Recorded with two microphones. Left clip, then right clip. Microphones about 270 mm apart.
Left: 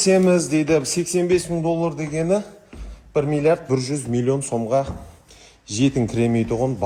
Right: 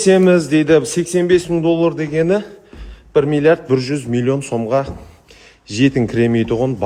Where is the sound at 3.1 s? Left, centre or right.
Right.